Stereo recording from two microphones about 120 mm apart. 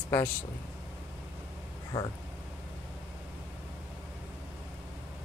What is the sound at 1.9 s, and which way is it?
Speech, 25° left (ahead or behind).